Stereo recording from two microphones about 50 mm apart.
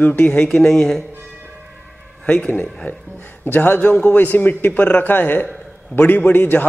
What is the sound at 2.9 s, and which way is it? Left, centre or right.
Speech, left.